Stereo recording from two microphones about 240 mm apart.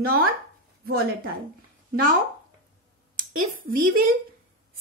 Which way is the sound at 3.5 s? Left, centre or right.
Right.